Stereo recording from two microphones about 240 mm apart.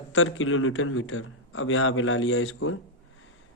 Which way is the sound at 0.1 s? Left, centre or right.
Left.